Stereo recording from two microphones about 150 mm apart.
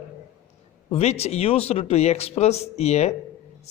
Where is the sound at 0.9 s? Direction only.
45° left (ahead or behind).